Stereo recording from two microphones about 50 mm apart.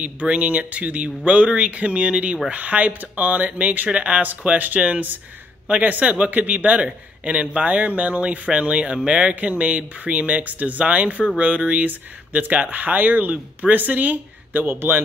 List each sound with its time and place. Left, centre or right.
0.0 s speech: right
9.3 s speech: right
14.7 s a man's voice: right